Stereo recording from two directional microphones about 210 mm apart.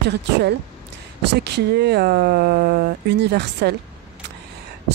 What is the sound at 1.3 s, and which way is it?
Speech, 50° right (ahead or behind).